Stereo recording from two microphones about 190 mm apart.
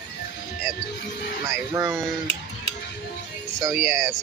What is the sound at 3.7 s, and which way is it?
Speech, centre (ahead or behind).